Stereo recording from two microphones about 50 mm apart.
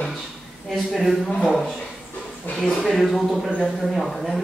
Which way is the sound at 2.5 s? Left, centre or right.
Left.